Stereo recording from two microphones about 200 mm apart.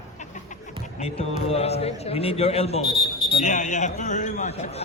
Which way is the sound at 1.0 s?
30° left (ahead or behind).